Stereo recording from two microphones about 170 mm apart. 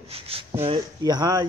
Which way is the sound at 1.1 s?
20° right (ahead or behind).